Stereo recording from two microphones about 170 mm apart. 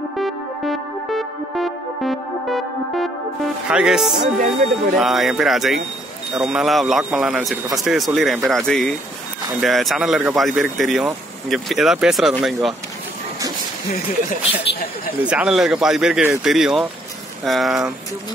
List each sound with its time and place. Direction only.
0.2 s music: centre (ahead or behind)
4.5 s speech: centre (ahead or behind)
14.6 s speech: 75° left (ahead or behind)
15.2 s speech: 5° right (ahead or behind)